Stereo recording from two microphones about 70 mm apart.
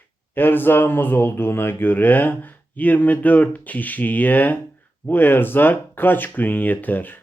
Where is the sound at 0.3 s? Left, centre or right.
Left.